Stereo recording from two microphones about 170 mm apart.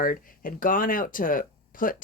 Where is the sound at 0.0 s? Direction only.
55° left (ahead or behind).